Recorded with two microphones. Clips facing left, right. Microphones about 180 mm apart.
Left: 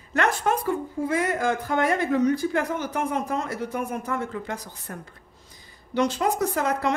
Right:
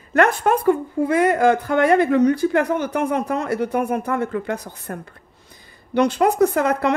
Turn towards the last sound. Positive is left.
turn(degrees=-60)  # may be behind; listen again after turning